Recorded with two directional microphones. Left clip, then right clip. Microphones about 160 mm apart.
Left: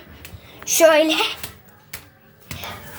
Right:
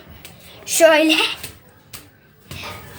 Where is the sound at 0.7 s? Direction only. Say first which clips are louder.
Right 1 dB; 5° right (ahead or behind).